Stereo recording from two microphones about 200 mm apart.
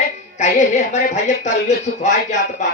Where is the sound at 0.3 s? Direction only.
35° left (ahead or behind).